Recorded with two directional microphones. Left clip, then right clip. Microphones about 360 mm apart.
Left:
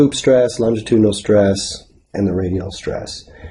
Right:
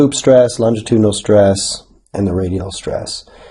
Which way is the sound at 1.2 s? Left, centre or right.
Centre.